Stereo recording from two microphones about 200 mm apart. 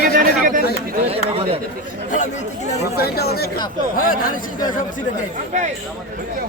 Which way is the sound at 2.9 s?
50° left (ahead or behind).